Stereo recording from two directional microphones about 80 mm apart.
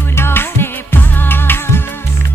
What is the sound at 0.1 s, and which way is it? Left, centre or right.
Music, left.